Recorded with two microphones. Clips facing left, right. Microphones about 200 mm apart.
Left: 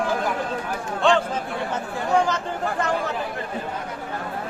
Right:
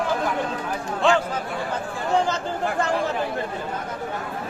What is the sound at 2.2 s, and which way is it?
Speech, 25° right (ahead or behind).